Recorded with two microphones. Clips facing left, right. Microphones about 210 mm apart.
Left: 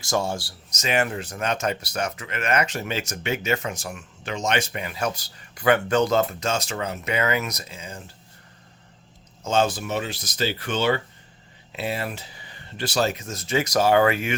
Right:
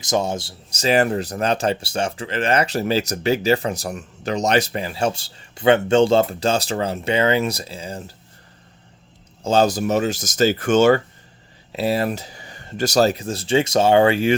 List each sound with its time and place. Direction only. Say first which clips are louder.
0.0 s speech: right 4 dB; 20° right (ahead or behind); by 8.1 s 35° right (ahead or behind)
9.4 s speech: right 5 dB; 35° right (ahead or behind)